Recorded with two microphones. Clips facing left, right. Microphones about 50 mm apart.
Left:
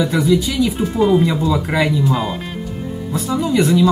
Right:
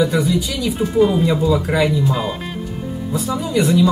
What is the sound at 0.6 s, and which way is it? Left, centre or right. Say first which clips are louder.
Speech: right 1 dB; centre.